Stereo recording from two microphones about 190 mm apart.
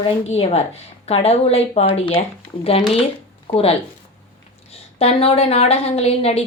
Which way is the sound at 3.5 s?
30° left (ahead or behind).